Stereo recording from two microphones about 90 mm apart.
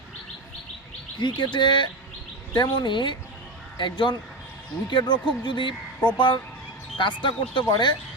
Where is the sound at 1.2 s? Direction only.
60° left (ahead or behind).